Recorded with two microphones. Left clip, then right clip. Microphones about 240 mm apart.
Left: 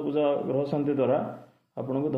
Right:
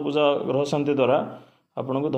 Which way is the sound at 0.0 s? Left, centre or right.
Right.